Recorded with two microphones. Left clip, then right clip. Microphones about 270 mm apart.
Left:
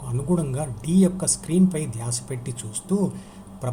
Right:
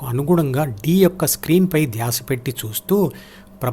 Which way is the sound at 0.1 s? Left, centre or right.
Right.